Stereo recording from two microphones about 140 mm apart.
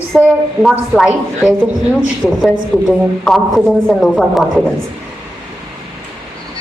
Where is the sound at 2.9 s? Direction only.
Centre (ahead or behind).